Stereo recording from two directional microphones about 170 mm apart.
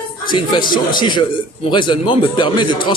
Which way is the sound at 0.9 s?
25° left (ahead or behind).